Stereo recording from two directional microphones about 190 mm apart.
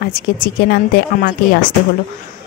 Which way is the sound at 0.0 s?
55° left (ahead or behind).